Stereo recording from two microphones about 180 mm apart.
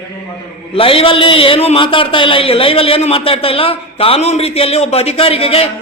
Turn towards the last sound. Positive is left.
turn(degrees=35)  # may be behind; listen again after turning